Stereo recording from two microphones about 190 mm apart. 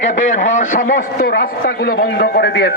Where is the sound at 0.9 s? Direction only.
60° left (ahead or behind).